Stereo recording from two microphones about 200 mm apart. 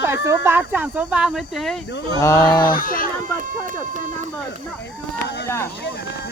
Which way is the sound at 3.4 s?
40° right (ahead or behind).